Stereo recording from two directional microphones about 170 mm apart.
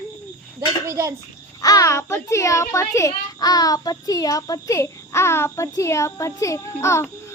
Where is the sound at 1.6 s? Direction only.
20° left (ahead or behind).